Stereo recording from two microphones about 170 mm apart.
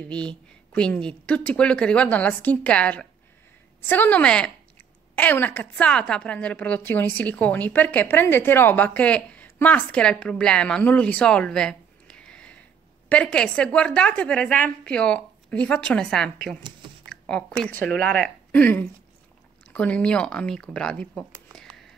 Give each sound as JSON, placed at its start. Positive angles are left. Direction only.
{"t": 0.0, "sound": "a woman's voice", "side_deg": 5}